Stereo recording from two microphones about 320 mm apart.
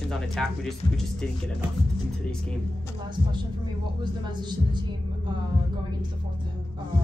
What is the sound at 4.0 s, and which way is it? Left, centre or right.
Speech, centre.